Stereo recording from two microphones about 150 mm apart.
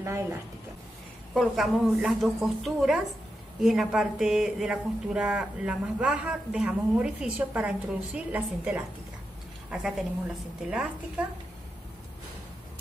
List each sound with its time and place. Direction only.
0.0 s a woman's voice: 20° right (ahead or behind)
1.3 s a woman's voice: centre (ahead or behind)